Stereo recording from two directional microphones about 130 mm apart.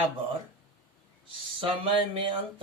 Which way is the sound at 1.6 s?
40° right (ahead or behind).